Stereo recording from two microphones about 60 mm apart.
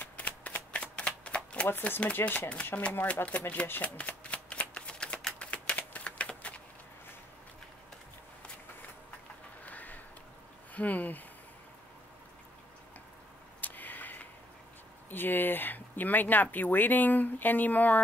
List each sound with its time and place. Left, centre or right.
0.0 s shuffling cards: left
1.7 s speech: left
3.8 s shuffling cards: left
9.7 s a sound: left
10.7 s speech: left
13.6 s a sound: left
15.0 s speech: left